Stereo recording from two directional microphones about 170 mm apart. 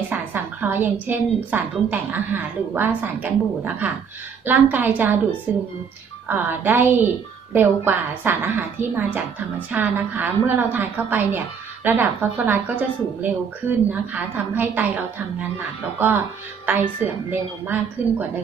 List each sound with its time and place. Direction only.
0.1 s a woman's voice: 10° right (ahead or behind)
18.0 s a woman's voice: 10° right (ahead or behind)